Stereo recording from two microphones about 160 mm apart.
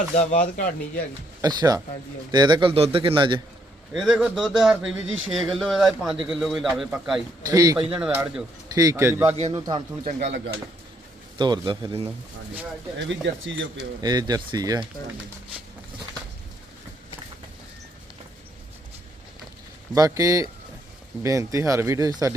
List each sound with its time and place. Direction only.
0.2 s speech: 50° left (ahead or behind)
0.4 s a man's voice: 60° left (ahead or behind)
1.4 s a man's voice: 25° right (ahead or behind)
3.9 s speech: 5° right (ahead or behind)
7.4 s speech: 20° right (ahead or behind)
7.9 s a man's voice: 5° right (ahead or behind)
8.7 s a man's voice: 20° right (ahead or behind)
9.5 s speech: 30° right (ahead or behind)
10.1 s speech: 50° right (ahead or behind)
11.3 s speech: 30° right (ahead or behind)
14.0 s speech: 25° right (ahead or behind)
19.9 s speech: 20° right (ahead or behind)